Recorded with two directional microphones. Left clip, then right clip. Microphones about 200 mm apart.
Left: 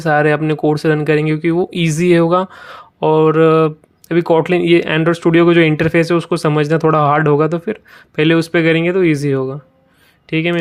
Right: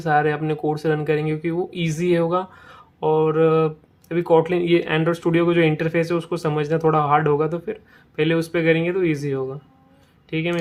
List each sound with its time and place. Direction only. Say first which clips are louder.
0.0 s speech: left 6 dB; 40° left (ahead or behind)